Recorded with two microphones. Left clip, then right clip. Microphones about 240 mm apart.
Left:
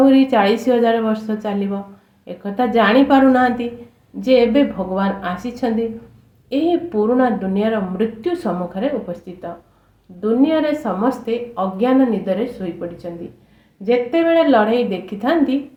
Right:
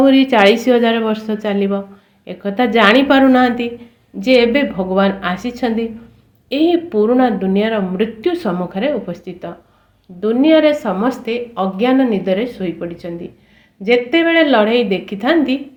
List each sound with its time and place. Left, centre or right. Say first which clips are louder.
0.0 s speech: right 3 dB; right
13.8 s speech: right 3 dB; right